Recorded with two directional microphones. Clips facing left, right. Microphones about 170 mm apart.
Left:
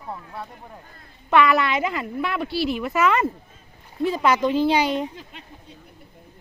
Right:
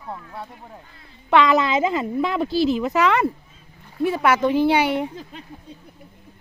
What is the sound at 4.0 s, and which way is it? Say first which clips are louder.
Speech: right 2 dB; centre (ahead or behind).